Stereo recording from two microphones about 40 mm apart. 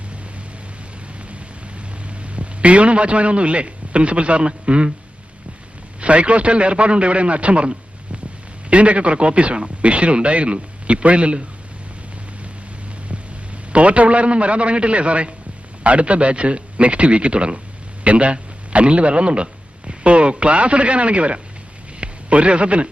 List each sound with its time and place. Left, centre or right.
2.0 s a man's voice: right
6.0 s speech: right
13.7 s a man's voice: right